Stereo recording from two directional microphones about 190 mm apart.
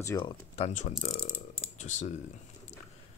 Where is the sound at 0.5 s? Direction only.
35° left (ahead or behind).